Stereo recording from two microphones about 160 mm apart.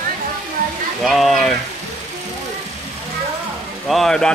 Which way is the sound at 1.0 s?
Centre (ahead or behind).